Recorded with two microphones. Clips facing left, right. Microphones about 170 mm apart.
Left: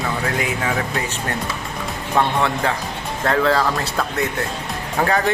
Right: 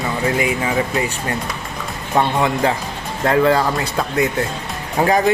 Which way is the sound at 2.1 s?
15° right (ahead or behind).